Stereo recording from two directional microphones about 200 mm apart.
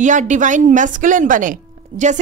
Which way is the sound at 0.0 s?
40° right (ahead or behind).